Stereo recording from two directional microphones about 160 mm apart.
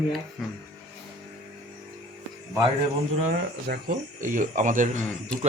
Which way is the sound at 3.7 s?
75° right (ahead or behind).